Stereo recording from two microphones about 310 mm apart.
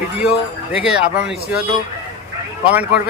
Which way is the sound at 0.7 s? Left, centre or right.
Centre.